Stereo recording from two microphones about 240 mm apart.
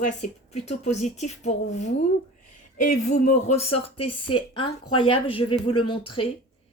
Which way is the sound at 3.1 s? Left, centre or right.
Left.